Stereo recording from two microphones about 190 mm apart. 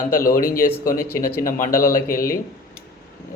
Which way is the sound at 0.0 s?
50° left (ahead or behind).